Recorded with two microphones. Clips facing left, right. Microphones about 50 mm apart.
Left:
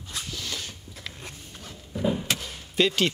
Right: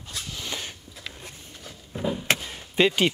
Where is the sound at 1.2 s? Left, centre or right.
Left.